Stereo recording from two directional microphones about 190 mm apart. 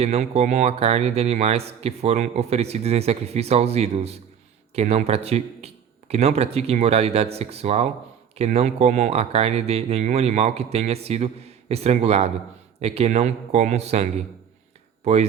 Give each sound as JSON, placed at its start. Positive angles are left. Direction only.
{"t": 0.0, "sound": "speech", "side_deg": -35}